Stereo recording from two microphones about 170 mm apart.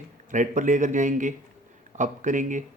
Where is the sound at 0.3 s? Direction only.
45° right (ahead or behind).